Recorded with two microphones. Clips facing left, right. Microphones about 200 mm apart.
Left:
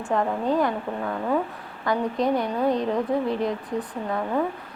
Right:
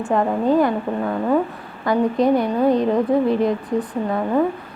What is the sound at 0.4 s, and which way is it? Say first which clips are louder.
A woman's voice: right 6 dB; 5° right (ahead or behind).